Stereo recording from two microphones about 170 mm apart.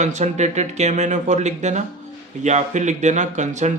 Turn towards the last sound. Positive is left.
turn(degrees=-45)  # may be behind; listen again after turning